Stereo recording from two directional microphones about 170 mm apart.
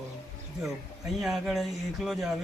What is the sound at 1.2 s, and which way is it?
Speech, centre (ahead or behind).